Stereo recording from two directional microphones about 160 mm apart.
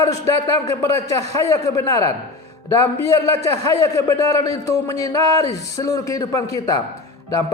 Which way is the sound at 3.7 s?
20° left (ahead or behind).